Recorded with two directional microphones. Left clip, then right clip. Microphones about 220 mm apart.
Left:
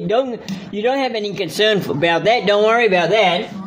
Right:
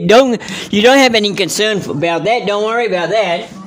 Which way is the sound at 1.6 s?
15° right (ahead or behind).